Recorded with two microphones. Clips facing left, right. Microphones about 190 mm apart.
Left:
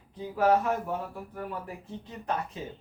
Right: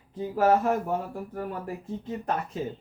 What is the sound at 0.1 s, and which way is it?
Speech, 45° right (ahead or behind).